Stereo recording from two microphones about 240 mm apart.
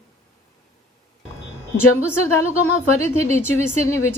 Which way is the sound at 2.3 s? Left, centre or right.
Left.